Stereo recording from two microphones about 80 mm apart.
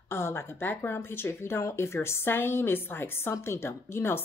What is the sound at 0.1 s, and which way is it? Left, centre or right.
Speech, left.